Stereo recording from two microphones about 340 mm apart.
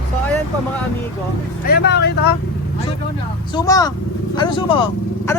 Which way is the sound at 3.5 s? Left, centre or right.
Centre.